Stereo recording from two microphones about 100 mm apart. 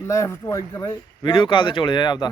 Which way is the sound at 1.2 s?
55° left (ahead or behind).